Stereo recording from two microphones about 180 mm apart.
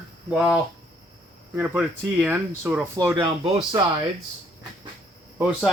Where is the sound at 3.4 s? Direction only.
25° right (ahead or behind).